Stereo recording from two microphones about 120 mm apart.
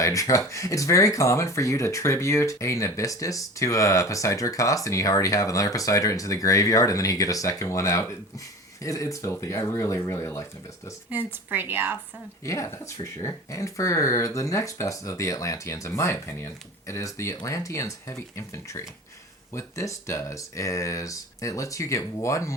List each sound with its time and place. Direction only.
0.0 s speech: 25° left (ahead or behind)
11.1 s a woman's voice: 15° right (ahead or behind)
12.5 s speech: 25° left (ahead or behind)